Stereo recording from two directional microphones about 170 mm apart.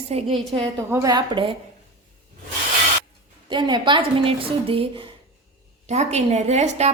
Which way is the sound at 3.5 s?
25° right (ahead or behind).